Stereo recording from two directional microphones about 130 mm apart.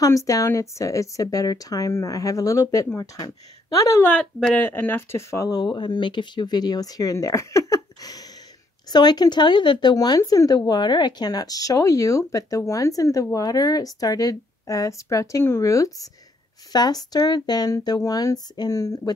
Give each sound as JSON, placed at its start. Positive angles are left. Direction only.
{"t": 0.0, "sound": "speech", "side_deg": 25}
{"t": 4.1, "sound": "speech", "side_deg": 10}